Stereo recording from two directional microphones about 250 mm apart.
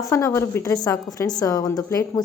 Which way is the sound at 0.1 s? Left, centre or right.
Centre.